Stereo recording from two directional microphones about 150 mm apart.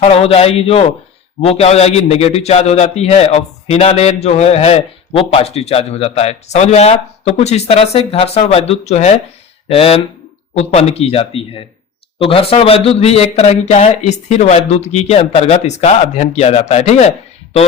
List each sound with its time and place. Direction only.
0.0 s a man's voice: 40° left (ahead or behind)